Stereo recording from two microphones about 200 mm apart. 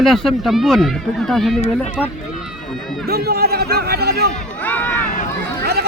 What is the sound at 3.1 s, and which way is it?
Speech, 50° right (ahead or behind).